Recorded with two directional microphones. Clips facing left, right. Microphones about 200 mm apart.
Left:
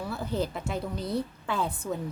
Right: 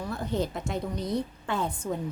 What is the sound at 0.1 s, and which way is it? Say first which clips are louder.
A woman's voice: right 2 dB; 5° left (ahead or behind).